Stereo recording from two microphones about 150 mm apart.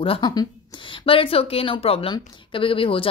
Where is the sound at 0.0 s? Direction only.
35° left (ahead or behind).